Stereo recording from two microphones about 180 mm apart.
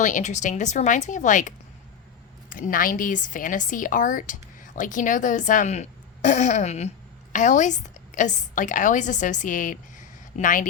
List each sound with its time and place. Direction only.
0.0 s a woman's voice: 40° left (ahead or behind)